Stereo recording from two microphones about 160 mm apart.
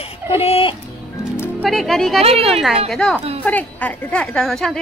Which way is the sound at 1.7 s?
Centre (ahead or behind).